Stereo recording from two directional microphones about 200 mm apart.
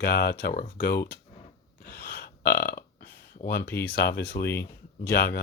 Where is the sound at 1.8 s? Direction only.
55° left (ahead or behind).